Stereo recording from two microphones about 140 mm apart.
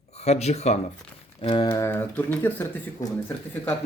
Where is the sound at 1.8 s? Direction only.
15° left (ahead or behind).